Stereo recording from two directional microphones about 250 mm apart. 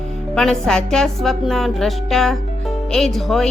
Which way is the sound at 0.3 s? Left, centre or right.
Centre.